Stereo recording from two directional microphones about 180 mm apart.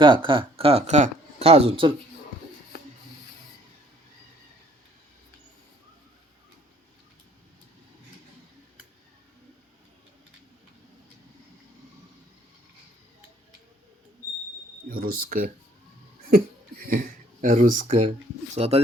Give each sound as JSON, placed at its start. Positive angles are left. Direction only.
{"t": 0.0, "sound": "speech", "side_deg": -25}
{"t": 2.7, "sound": "rub", "side_deg": 60}
{"t": 14.8, "sound": "speech", "side_deg": -55}
{"t": 18.5, "sound": "speech", "side_deg": -35}